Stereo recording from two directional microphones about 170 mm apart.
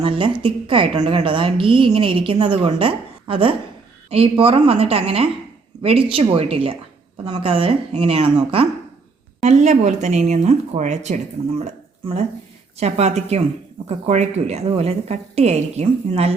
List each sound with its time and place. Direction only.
0.0 s a woman's voice: 30° right (ahead or behind)
11.6 s a sound: 40° right (ahead or behind)
12.7 s a woman's voice: 40° right (ahead or behind)